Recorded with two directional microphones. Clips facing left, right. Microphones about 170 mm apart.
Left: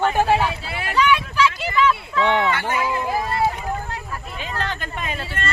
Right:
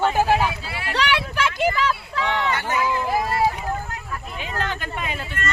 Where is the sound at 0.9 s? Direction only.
75° right (ahead or behind); by 1.7 s 55° right (ahead or behind).